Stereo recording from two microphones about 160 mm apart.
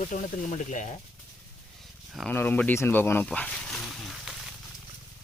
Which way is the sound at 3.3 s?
5° left (ahead or behind).